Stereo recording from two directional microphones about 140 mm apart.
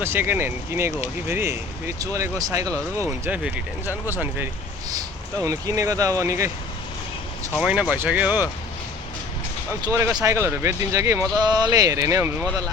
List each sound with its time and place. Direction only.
0.0 s speech: 15° right (ahead or behind)
3.0 s speech: 10° right (ahead or behind)
7.6 s speech: 10° right (ahead or behind)
10.2 s speech: 20° right (ahead or behind)